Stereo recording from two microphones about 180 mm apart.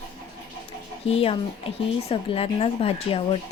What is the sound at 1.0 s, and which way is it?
A woman's voice, 35° left (ahead or behind).